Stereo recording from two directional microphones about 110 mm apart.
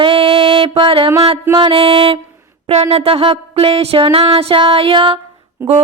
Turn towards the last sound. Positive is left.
turn(degrees=-25)  # may be behind; listen again after turning